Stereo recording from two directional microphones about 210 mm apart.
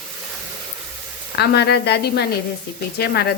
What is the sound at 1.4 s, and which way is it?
A woman's voice, 50° left (ahead or behind).